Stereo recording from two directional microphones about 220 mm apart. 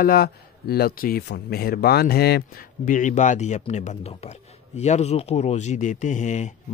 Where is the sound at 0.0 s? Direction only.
45° left (ahead or behind).